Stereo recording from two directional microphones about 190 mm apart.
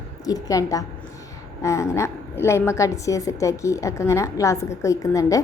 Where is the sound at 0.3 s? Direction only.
20° left (ahead or behind).